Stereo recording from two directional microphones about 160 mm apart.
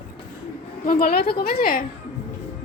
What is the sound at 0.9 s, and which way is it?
Speech, 70° left (ahead or behind).